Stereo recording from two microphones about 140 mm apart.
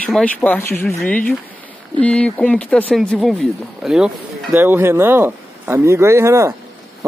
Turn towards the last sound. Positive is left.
turn(degrees=-20)  # may be behind; listen again after turning